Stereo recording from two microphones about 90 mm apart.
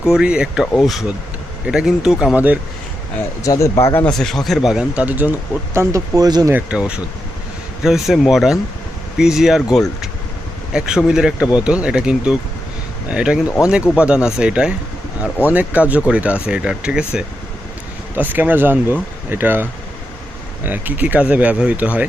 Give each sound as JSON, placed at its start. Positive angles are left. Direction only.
{"t": 0.0, "sound": "speech", "side_deg": -10}
{"t": 1.6, "sound": "speech", "side_deg": -10}
{"t": 3.4, "sound": "speech", "side_deg": 40}
{"t": 4.0, "sound": "speech", "side_deg": 5}
{"t": 4.7, "sound": "speech", "side_deg": -10}
{"t": 5.7, "sound": "speech", "side_deg": -30}
{"t": 6.1, "sound": "speech", "side_deg": -45}
{"t": 6.5, "sound": "speech", "side_deg": -15}
{"t": 18.2, "sound": "speech", "side_deg": -20}
{"t": 20.7, "sound": "speech", "side_deg": -20}